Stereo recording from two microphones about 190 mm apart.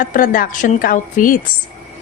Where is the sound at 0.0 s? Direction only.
45° left (ahead or behind).